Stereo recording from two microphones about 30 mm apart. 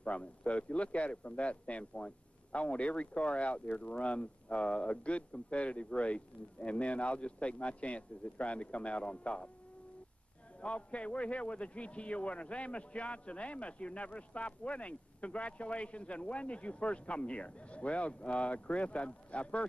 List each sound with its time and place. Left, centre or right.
0.0 s a man's voice: left
10.6 s a man's voice: left